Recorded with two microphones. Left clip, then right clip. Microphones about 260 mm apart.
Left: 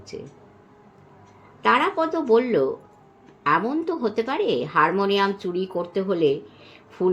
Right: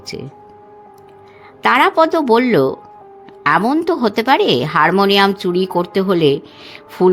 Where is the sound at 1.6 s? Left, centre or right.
Right.